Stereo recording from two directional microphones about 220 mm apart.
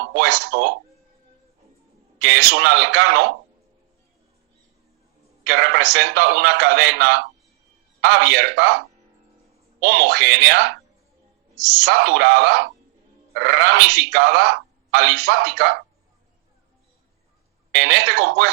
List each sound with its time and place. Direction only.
0.0 s speech: 50° right (ahead or behind)
2.1 s speech: 50° right (ahead or behind)
5.5 s speech: 50° right (ahead or behind)
9.8 s speech: 50° right (ahead or behind)
17.7 s speech: 50° right (ahead or behind)